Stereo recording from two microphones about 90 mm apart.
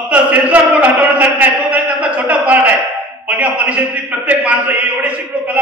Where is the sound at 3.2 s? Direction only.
15° right (ahead or behind).